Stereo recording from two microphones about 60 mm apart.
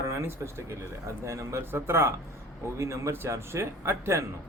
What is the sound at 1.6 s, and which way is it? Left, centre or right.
Speech, right.